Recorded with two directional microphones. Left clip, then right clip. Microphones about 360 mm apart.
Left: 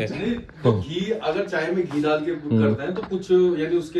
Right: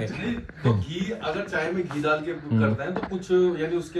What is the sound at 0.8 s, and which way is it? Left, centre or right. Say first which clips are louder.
Speech: left 5 dB; centre.